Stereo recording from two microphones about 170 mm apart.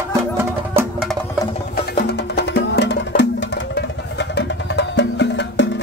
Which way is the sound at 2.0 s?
75° left (ahead or behind).